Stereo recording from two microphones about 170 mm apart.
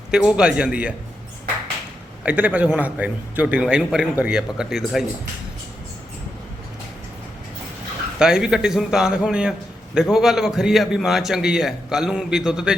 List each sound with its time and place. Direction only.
0.1 s a man's voice: 5° right (ahead or behind)
2.2 s a man's voice: 10° right (ahead or behind)
8.2 s a man's voice: 5° right (ahead or behind)